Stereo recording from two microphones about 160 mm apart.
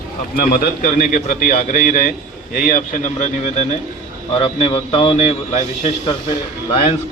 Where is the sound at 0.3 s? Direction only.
60° left (ahead or behind); by 3.8 s 45° left (ahead or behind).